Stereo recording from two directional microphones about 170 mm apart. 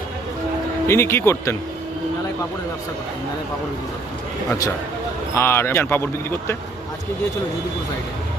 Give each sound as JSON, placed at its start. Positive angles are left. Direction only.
{"t": 0.9, "sound": "speech", "side_deg": 15}
{"t": 5.3, "sound": "speech", "side_deg": 15}